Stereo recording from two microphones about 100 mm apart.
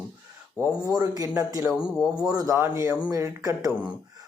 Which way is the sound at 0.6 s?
35° right (ahead or behind).